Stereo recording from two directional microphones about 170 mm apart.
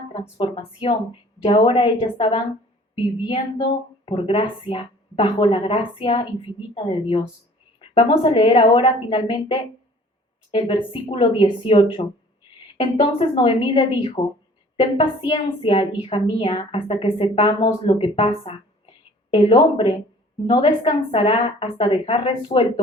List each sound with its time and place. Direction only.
0.1 s a woman's voice: 30° left (ahead or behind)
3.6 s a woman's voice: 30° left (ahead or behind)